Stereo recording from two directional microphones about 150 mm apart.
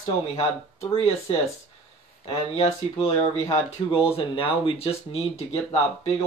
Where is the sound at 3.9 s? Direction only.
40° left (ahead or behind).